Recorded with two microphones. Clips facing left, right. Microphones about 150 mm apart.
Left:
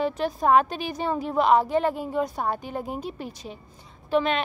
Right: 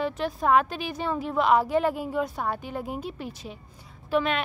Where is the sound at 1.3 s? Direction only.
35° left (ahead or behind).